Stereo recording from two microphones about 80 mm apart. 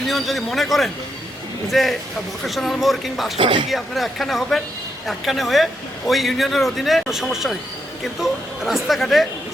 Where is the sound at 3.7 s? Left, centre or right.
Centre.